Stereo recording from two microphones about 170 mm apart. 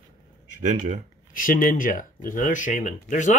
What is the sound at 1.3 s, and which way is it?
Speech, 55° left (ahead or behind).